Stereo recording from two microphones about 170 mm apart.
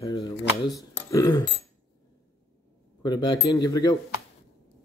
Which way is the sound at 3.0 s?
25° left (ahead or behind).